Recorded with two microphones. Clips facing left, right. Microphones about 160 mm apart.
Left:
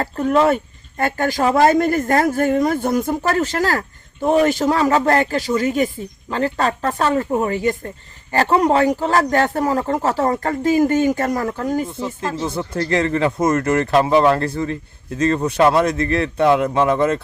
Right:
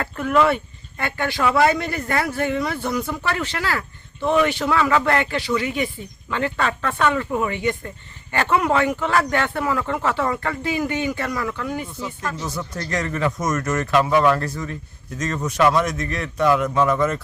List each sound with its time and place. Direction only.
0.0 s a man's voice: 35° left (ahead or behind)
12.2 s a man's voice: 30° left (ahead or behind)